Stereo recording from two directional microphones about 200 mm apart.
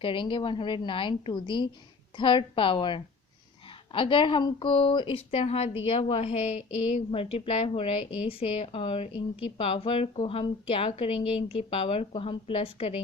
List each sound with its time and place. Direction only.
0.0 s a woman's voice: 25° left (ahead or behind)